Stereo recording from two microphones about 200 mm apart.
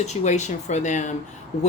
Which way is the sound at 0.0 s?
35° left (ahead or behind).